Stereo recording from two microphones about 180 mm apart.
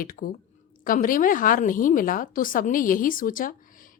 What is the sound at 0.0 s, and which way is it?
A woman's voice, 50° left (ahead or behind).